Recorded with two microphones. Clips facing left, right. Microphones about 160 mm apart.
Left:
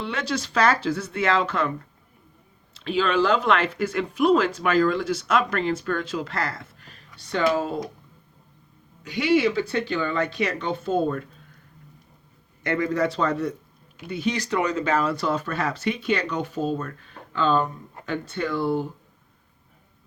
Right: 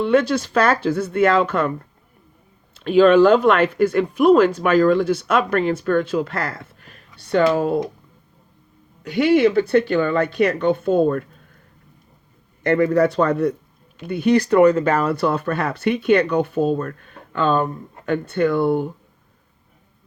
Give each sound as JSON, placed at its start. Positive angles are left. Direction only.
{"t": 0.0, "sound": "speech", "side_deg": -50}
{"t": 2.7, "sound": "speech", "side_deg": -50}
{"t": 9.0, "sound": "speech", "side_deg": -55}
{"t": 12.6, "sound": "speech", "side_deg": -55}